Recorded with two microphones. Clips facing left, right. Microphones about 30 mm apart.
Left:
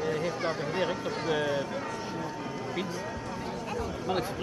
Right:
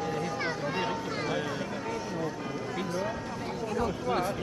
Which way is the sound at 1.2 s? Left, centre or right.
Centre.